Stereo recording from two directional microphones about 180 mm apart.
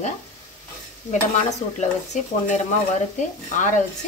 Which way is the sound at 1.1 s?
40° left (ahead or behind).